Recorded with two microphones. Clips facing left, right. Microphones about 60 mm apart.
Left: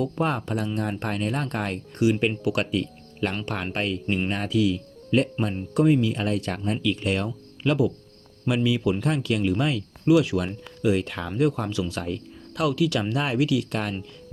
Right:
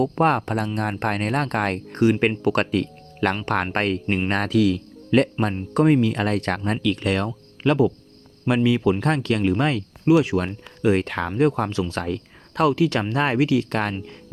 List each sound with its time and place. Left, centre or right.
0.0 s speech: right
4.3 s speech: right
7.6 s speech: right
10.1 s speech: right